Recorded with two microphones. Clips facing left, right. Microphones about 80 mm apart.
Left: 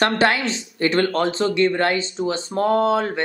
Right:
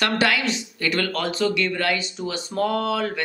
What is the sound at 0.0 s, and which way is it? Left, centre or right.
Speech, left.